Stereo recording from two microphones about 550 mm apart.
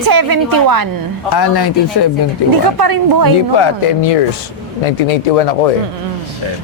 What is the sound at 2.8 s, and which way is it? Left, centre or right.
Speech, right.